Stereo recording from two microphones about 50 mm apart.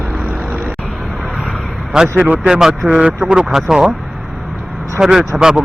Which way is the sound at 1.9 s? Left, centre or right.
Centre.